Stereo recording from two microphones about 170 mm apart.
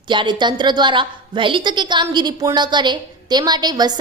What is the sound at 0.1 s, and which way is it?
A woman's voice, 25° right (ahead or behind).